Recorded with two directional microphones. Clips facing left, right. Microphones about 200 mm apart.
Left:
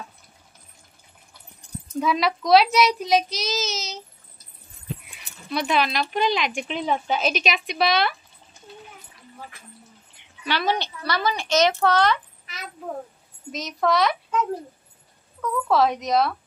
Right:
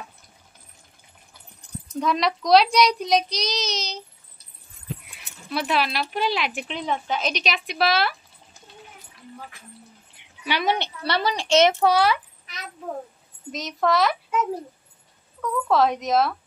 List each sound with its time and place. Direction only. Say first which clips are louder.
2.0 s a child's voice: left 1 dB; 5° left (ahead or behind)
5.0 s speech: left 1 dB; centre (ahead or behind)
6.9 s a child's voice: left 2 dB; 10° left (ahead or behind)
10.4 s a woman's voice: even; 15° right (ahead or behind); by 11.4 s 30° right (ahead or behind)
11.8 s a child's voice: right 1 dB; 10° right (ahead or behind)
15.4 s a child's voice: even; centre (ahead or behind)